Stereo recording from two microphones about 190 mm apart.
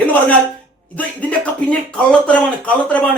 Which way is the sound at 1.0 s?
5° left (ahead or behind).